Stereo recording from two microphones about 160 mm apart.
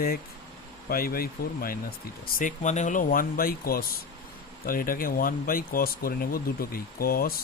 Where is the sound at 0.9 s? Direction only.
65° left (ahead or behind).